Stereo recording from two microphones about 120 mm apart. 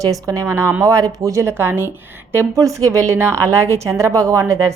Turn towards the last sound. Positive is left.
turn(degrees=-25)  # may be behind; listen again after turning